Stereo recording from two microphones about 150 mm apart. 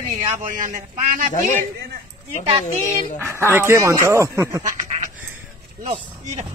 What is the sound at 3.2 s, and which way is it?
Speech, 15° right (ahead or behind).